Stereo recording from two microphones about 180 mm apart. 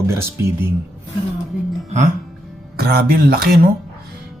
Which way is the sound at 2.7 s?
60° right (ahead or behind).